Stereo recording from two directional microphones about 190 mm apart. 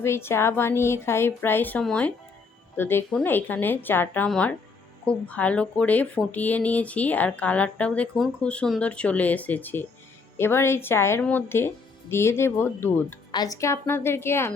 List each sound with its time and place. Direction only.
0.0 s speech: 15° left (ahead or behind)